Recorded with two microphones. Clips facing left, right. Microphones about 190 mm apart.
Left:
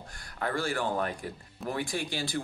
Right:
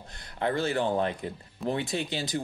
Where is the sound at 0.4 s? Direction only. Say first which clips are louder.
Right 4 dB; 20° right (ahead or behind).